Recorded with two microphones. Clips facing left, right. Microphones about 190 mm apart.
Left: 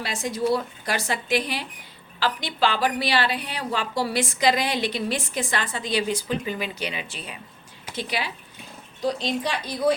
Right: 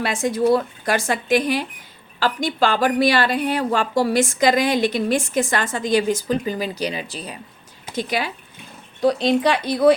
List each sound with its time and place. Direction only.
0.0 s a woman's voice: 50° right (ahead or behind)
9.0 s speech: 60° right (ahead or behind)